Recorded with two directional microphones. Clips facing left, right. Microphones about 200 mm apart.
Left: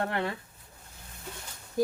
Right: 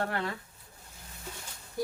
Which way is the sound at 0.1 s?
20° left (ahead or behind).